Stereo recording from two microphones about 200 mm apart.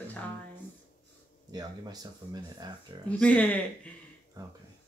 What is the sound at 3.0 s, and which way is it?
Speech, 5° left (ahead or behind).